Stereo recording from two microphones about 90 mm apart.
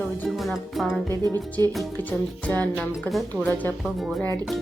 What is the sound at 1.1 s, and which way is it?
Speech, 45° right (ahead or behind).